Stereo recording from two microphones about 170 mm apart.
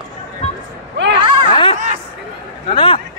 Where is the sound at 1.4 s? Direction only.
30° left (ahead or behind).